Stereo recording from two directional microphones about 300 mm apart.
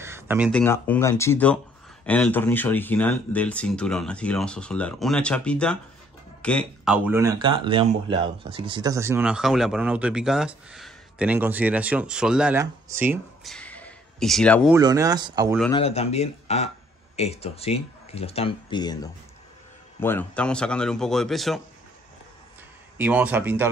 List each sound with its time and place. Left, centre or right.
0.0 s a sound: centre
0.5 s speech: centre
14.7 s speech: centre
15.7 s speech: centre
22.9 s speech: centre